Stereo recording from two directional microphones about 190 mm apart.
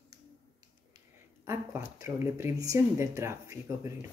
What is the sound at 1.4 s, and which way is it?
Speech, 15° right (ahead or behind).